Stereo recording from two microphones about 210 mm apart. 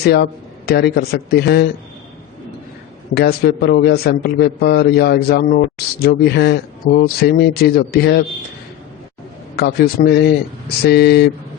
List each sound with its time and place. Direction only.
0.0 s a man's voice: 50° left (ahead or behind)
3.2 s a man's voice: 50° left (ahead or behind)
9.6 s a man's voice: 50° left (ahead or behind)